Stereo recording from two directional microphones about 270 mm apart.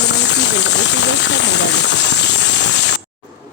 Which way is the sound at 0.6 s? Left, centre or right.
Left.